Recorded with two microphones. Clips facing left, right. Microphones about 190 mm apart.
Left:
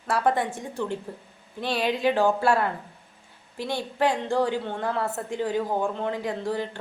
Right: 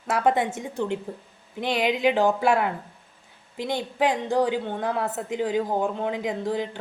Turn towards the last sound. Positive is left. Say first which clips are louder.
# right 1 dB
turn(degrees=-15)  # may be behind; listen again after turning